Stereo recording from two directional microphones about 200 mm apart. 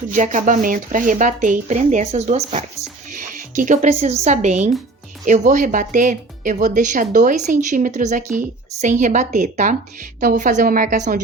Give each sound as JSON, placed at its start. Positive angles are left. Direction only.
{"t": 0.1, "sound": "speech", "side_deg": -40}